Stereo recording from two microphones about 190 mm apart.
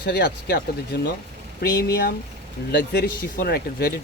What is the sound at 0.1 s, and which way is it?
Speech, 60° left (ahead or behind).